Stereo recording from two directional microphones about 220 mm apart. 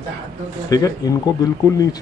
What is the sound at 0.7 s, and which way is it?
Speech, 15° left (ahead or behind).